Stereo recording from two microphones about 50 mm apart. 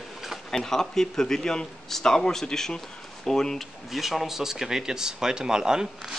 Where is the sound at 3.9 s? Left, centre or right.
Centre.